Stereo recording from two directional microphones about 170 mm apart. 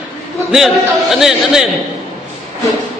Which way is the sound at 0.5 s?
Centre (ahead or behind).